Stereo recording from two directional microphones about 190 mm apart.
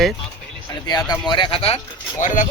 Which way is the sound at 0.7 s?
20° left (ahead or behind).